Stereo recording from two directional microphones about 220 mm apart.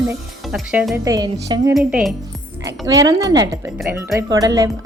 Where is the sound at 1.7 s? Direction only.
Centre (ahead or behind).